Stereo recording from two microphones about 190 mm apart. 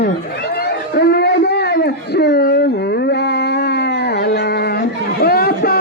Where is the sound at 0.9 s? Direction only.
60° left (ahead or behind).